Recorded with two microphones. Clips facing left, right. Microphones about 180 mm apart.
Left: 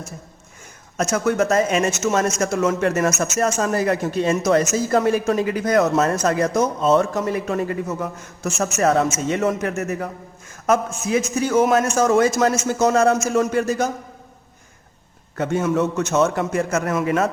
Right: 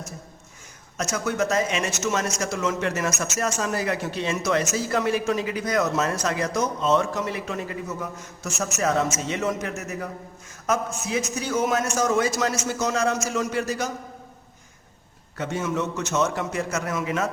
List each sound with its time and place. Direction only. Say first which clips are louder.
1.1 s a man's voice: left 6 dB; 50° left (ahead or behind)
9.1 s a man's voice: left 5 dB; 50° left (ahead or behind)
15.4 s a man's voice: left 7 dB; 55° left (ahead or behind)